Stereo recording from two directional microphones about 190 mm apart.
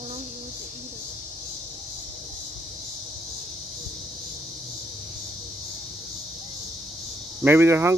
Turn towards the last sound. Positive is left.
turn(degrees=-15)  # may be behind; listen again after turning